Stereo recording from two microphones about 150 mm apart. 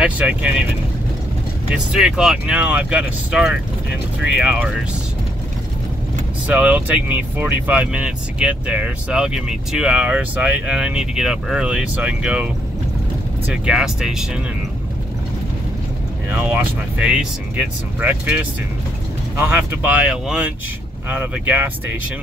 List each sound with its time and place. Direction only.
0.0 s speech: 10° right (ahead or behind)
1.7 s speech: 5° right (ahead or behind)
6.4 s speech: 10° right (ahead or behind)
13.7 s speech: 5° right (ahead or behind)
16.3 s speech: 10° right (ahead or behind)